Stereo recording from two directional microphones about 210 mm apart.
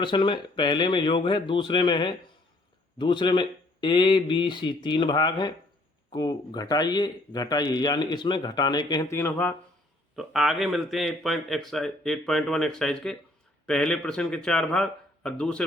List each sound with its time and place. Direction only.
0.0 s speech: 25° left (ahead or behind); by 15.6 s 5° left (ahead or behind)